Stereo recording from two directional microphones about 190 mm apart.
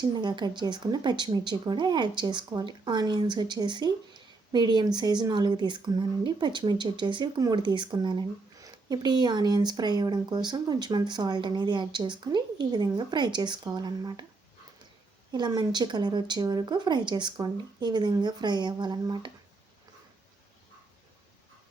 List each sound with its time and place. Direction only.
0.0 s speech: 25° right (ahead or behind)
15.3 s speech: 20° right (ahead or behind)